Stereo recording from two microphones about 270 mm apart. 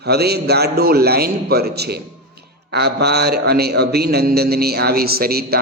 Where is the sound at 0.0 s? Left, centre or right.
Right.